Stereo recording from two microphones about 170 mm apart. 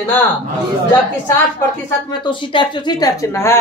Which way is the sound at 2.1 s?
30° left (ahead or behind).